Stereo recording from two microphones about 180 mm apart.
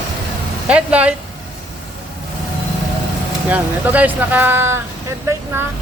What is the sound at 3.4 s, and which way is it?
Speech, 10° right (ahead or behind).